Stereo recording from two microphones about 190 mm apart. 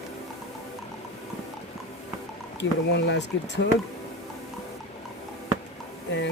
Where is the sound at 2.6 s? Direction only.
65° left (ahead or behind).